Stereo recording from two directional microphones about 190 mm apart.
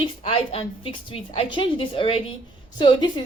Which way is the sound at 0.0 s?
30° left (ahead or behind).